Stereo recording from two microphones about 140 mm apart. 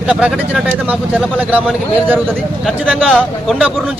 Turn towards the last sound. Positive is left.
turn(degrees=-5)  # may be behind; listen again after turning